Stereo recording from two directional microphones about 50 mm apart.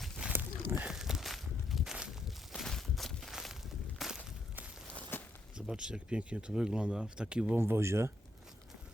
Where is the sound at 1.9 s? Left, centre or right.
Centre.